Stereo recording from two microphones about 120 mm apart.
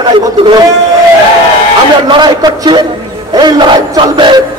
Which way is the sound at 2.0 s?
40° right (ahead or behind).